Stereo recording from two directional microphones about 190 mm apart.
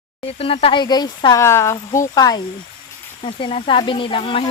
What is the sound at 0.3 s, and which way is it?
Speech, 30° left (ahead or behind).